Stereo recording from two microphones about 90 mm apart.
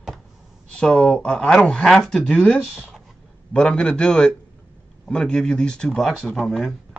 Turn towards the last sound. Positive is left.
turn(degrees=0)  # may be behind; listen again after turning